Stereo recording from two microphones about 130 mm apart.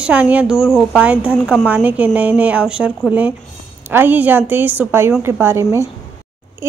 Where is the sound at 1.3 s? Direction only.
5° left (ahead or behind).